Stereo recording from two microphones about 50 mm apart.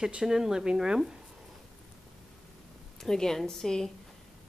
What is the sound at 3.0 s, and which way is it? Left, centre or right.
Speech, centre.